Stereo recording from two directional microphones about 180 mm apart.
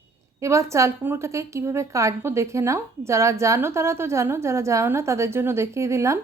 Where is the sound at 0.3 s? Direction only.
15° right (ahead or behind).